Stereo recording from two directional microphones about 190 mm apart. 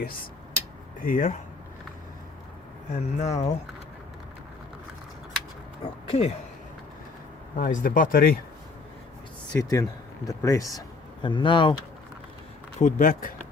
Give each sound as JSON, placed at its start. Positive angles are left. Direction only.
{"t": 0.0, "sound": "speech", "side_deg": 50}
{"t": 2.9, "sound": "speech", "side_deg": 35}
{"t": 6.1, "sound": "speech", "side_deg": 35}
{"t": 7.5, "sound": "speech", "side_deg": 45}
{"t": 9.6, "sound": "speech", "side_deg": 15}
{"t": 12.8, "sound": "speech", "side_deg": 45}